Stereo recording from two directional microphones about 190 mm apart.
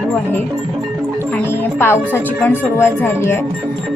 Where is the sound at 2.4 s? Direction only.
10° left (ahead or behind).